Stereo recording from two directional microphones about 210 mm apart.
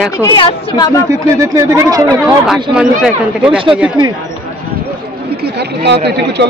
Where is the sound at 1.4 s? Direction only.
15° right (ahead or behind).